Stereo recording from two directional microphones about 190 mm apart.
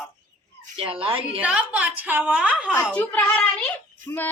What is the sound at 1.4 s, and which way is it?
A woman's voice, 5° right (ahead or behind).